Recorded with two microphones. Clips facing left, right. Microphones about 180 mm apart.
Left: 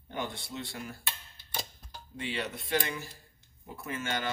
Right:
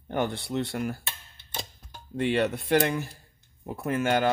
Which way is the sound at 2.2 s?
55° right (ahead or behind).